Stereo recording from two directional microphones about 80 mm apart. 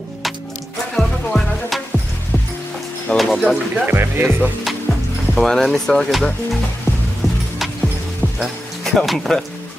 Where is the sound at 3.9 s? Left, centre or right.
Right.